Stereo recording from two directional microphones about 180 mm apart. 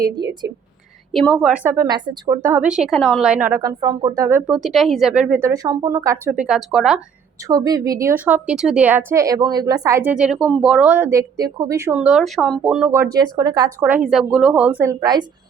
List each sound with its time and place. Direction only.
0.4 s speech: 20° right (ahead or behind)
1.1 s a woman's voice: centre (ahead or behind); by 6.1 s 20° right (ahead or behind)
6.2 s speech: 5° right (ahead or behind)
7.4 s a woman's voice: 20° right (ahead or behind)
11.9 s a woman's voice: 5° right (ahead or behind)